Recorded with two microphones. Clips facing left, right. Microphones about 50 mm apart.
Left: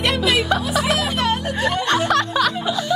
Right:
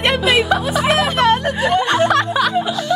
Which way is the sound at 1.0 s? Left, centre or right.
Right.